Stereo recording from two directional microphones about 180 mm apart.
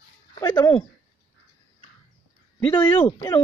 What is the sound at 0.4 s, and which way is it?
Speech, 25° left (ahead or behind).